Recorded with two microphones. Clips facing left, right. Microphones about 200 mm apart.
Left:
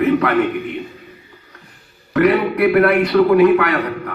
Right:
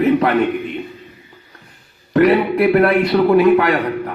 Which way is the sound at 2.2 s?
25° right (ahead or behind).